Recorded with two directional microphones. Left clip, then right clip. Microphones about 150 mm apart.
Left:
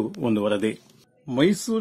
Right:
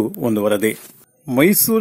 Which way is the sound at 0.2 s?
25° right (ahead or behind).